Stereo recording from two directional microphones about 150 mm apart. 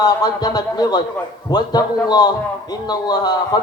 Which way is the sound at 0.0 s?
25° left (ahead or behind).